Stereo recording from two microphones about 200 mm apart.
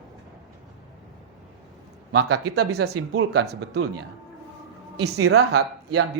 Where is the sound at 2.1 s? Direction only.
90° right.